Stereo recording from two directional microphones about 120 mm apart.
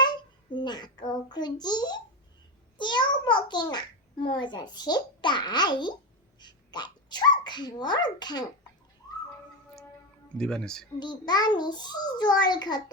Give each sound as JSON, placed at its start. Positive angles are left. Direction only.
{"t": 0.6, "sound": "a child's voice", "side_deg": 40}
{"t": 10.3, "sound": "speech", "side_deg": 5}
{"t": 11.0, "sound": "a child's voice", "side_deg": 35}